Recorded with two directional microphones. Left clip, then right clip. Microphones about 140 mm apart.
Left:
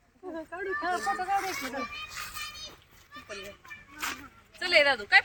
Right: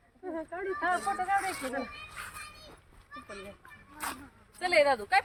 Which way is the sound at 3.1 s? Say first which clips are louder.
Left 3 dB; 45° right (ahead or behind).